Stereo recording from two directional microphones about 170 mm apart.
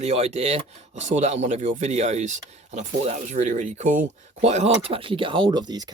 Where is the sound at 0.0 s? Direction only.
40° right (ahead or behind).